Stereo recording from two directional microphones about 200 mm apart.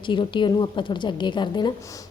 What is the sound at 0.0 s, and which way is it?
A woman's voice, 25° left (ahead or behind).